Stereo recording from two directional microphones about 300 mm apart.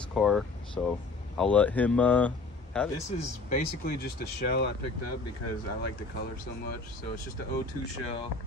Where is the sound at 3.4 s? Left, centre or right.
Left.